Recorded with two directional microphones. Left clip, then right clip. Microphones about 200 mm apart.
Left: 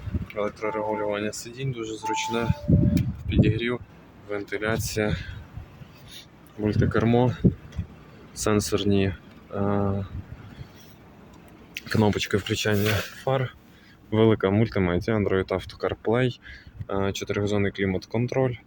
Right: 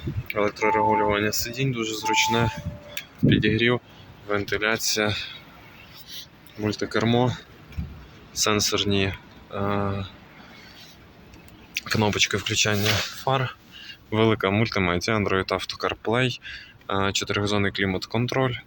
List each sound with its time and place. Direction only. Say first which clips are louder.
0.3 s speech: right 6 dB; centre (ahead or behind)
4.3 s speech: right 5 dB; 10° left (ahead or behind)
4.7 s speech: right 3 dB; 20° left (ahead or behind)
6.6 s speech: even; 20° left (ahead or behind)
8.4 s speech: right 2 dB; 25° left (ahead or behind)
11.7 s speech: right 1 dB; 25° left (ahead or behind)